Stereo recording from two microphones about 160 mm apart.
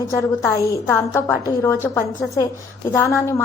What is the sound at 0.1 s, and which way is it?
A woman's voice, 20° left (ahead or behind).